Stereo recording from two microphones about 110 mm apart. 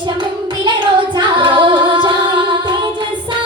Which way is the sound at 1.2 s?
50° right (ahead or behind).